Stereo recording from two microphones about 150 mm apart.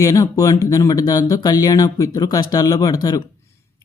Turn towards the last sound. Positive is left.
turn(degrees=25)  # may be behind; listen again after turning